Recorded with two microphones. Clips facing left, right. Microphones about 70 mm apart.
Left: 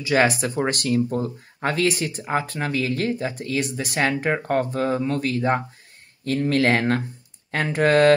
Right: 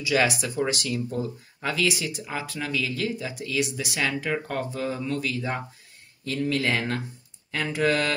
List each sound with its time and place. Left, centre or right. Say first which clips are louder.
0.0 s speech: left 4 dB; left
6.5 s speech: left 8 dB; left